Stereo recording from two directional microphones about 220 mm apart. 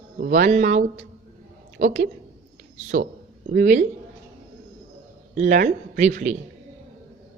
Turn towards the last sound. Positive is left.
turn(degrees=-35)  # may be behind; listen again after turning